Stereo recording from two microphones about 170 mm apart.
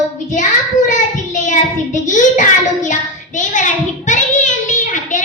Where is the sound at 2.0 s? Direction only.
45° left (ahead or behind).